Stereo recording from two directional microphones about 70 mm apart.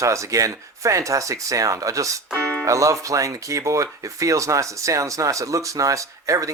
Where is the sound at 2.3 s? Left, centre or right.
Left.